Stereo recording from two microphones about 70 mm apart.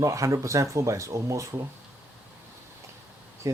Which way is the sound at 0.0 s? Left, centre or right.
Right.